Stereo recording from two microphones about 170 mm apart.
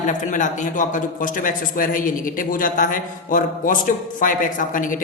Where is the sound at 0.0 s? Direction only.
50° left (ahead or behind).